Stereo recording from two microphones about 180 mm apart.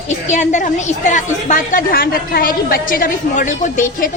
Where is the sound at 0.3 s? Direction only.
45° left (ahead or behind).